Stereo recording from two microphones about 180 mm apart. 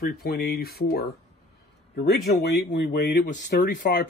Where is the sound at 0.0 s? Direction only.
60° left (ahead or behind).